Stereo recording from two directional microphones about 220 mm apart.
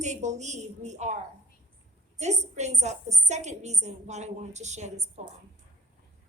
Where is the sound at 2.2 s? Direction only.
30° right (ahead or behind).